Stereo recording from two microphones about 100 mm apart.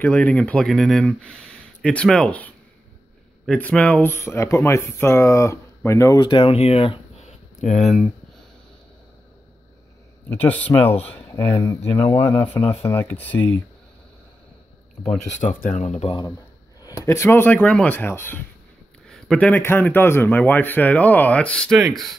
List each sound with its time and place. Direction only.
0.0 s a man's voice: 10° left (ahead or behind); by 6.1 s 30° left (ahead or behind)
6.1 s speech: 50° left (ahead or behind); by 7.3 s 80° left
7.8 s speech: centre (ahead or behind)
10.3 s a man's voice: 15° left (ahead or behind)
15.4 s speech: 65° left (ahead or behind)
15.9 s speech: 90° left
16.8 s speech: 30° left (ahead or behind)
19.0 s a man's voice: 5° left (ahead or behind)